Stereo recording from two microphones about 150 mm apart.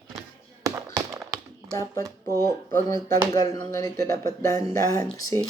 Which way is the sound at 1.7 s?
20° left (ahead or behind).